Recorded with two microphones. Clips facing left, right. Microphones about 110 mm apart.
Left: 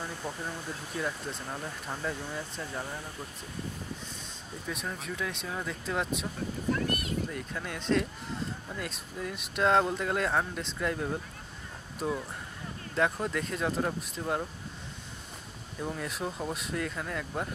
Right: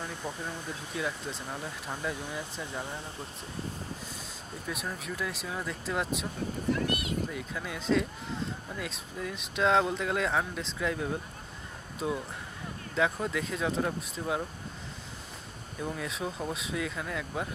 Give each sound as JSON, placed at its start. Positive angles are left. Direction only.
{"t": 0.0, "sound": "speech", "side_deg": 10}
{"t": 0.7, "sound": "speech", "side_deg": 0}
{"t": 4.6, "sound": "speech", "side_deg": 0}
{"t": 6.9, "sound": "a sound", "side_deg": 45}
{"t": 7.2, "sound": "speech", "side_deg": 0}
{"t": 15.8, "sound": "speech", "side_deg": 0}